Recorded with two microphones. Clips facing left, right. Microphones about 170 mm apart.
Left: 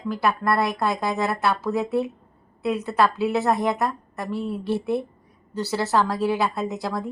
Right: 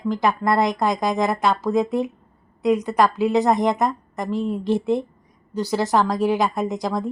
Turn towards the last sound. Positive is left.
turn(degrees=-15)  # may be behind; listen again after turning